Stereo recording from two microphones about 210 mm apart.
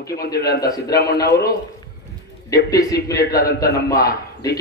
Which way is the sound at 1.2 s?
50° left (ahead or behind).